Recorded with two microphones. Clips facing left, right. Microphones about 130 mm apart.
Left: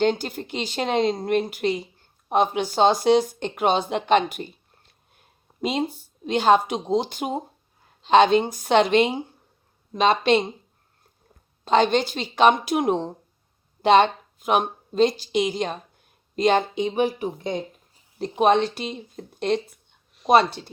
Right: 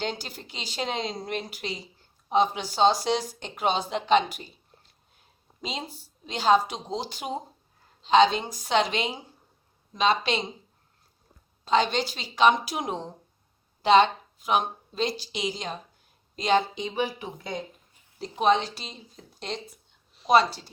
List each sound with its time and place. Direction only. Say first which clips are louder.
0.0 s speech: left 10 dB; 55° left (ahead or behind)
11.6 s speech: left 5 dB; 50° left (ahead or behind)
18.2 s speech: left 4 dB; 55° left (ahead or behind)